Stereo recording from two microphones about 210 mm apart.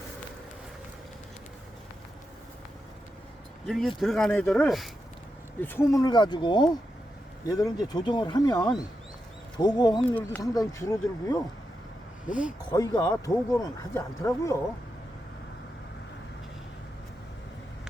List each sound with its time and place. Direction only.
3.7 s speech: centre (ahead or behind)
12.7 s speech: 15° left (ahead or behind)